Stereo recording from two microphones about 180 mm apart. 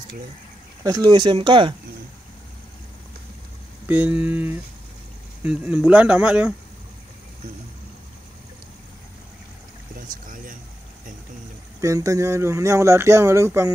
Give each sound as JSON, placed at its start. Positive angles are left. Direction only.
{"t": 0.8, "sound": "speech", "side_deg": -20}
{"t": 3.8, "sound": "speech", "side_deg": -10}
{"t": 10.2, "sound": "speech", "side_deg": -50}
{"t": 11.8, "sound": "speech", "side_deg": -15}